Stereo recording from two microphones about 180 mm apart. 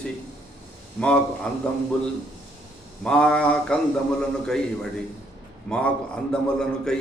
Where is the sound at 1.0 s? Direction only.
5° left (ahead or behind).